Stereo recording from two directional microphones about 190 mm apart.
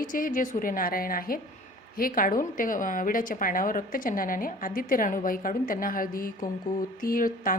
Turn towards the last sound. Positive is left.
turn(degrees=45)  # may be behind; listen again after turning